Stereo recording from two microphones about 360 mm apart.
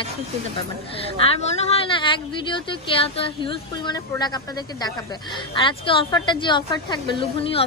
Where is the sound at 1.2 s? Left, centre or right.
Centre.